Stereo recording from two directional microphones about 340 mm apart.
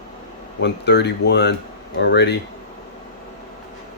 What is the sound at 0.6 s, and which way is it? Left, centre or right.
Speech, left.